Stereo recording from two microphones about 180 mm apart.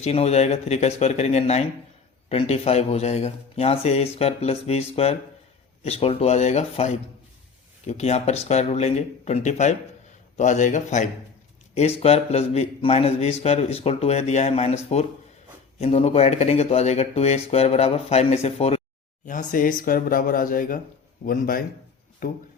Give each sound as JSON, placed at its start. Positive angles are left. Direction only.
{"t": 0.0, "sound": "a man's voice", "side_deg": 35}
{"t": 19.2, "sound": "speech", "side_deg": 45}